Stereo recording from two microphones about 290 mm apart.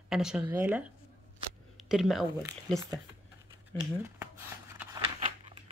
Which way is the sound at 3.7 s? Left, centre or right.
Centre.